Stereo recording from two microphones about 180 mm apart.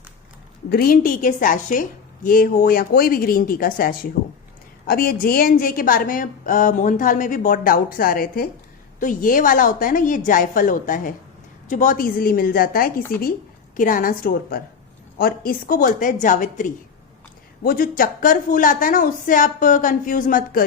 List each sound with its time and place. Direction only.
0.7 s a woman's voice: 55° left (ahead or behind)